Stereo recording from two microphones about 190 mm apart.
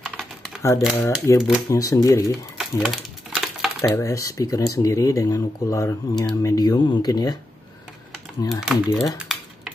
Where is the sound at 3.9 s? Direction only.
15° left (ahead or behind).